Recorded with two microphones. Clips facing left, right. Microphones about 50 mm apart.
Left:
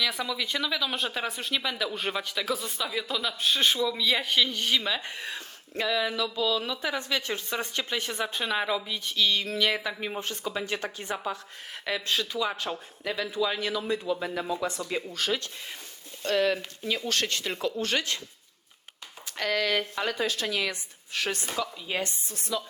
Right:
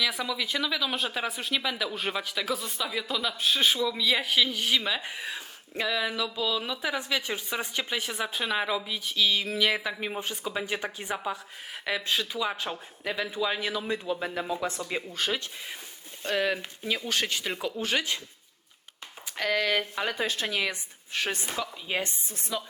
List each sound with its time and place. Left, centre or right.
0.0 s speech: centre
13.8 s a woman's voice: right
16.2 s speech: centre
19.4 s speech: centre
20.1 s a woman's voice: right